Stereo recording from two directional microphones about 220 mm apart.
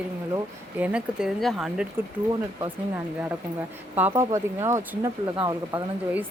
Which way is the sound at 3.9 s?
10° right (ahead or behind).